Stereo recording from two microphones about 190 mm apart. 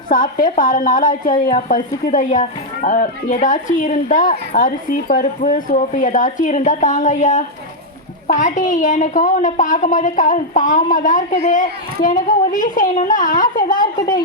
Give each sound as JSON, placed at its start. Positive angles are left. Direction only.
{"t": 0.5, "sound": "a woman's voice", "side_deg": 45}
{"t": 1.5, "sound": "a woman's voice", "side_deg": 35}